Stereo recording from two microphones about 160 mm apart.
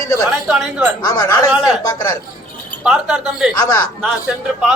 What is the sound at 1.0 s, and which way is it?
Speech, 20° left (ahead or behind).